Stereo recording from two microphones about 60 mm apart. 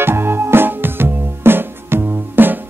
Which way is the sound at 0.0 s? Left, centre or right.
Right.